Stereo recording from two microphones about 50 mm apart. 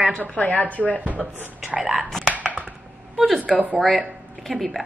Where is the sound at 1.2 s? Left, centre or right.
Centre.